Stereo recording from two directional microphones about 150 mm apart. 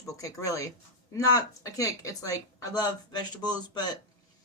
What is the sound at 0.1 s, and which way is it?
Speech, 20° left (ahead or behind).